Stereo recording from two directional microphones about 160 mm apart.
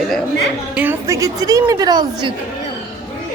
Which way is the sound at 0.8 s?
15° right (ahead or behind).